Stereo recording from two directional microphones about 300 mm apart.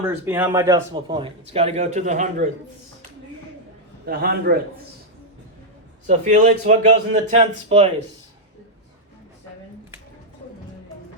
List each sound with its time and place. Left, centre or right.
0.1 s a man's voice: centre; by 2.5 s right
4.0 s a man's voice: right
6.1 s a man's voice: right